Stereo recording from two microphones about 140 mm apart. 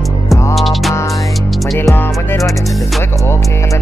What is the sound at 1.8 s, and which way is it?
Music, 20° left (ahead or behind).